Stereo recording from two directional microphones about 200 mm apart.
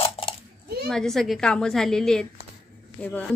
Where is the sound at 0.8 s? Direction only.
Centre (ahead or behind).